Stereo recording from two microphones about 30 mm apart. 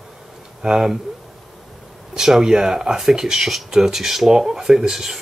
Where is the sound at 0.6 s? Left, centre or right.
Centre.